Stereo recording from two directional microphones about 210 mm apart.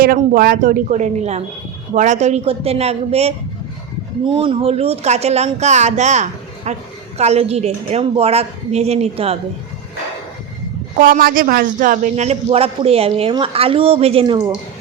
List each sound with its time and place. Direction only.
0.0 s a man's voice: 45° right (ahead or behind)
11.0 s a man's voice: 45° right (ahead or behind); by 14.5 s 25° right (ahead or behind)